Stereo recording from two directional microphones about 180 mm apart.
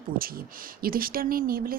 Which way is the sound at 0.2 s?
55° right (ahead or behind).